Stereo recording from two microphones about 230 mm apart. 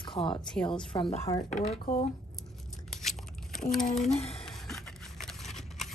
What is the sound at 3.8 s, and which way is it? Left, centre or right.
Speech, left.